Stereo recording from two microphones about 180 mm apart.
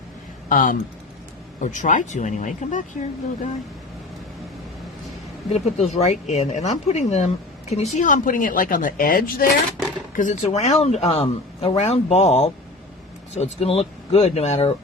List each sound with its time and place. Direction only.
0.4 s speech: 50° left (ahead or behind)
5.5 s speech: 40° left (ahead or behind); by 9.5 s 55° left (ahead or behind)
10.2 s speech: 40° left (ahead or behind)